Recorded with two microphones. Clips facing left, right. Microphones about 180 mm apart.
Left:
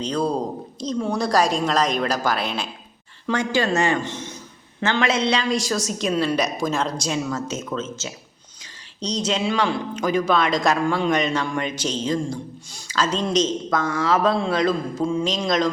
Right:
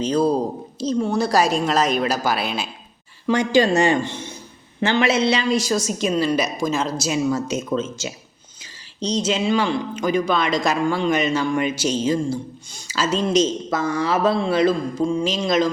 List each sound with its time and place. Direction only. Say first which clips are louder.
0.0 s speech: right 4 dB; 5° right (ahead or behind)
3.3 s speech: right 4 dB; 15° right (ahead or behind)
9.0 s speech: right 2 dB; centre (ahead or behind)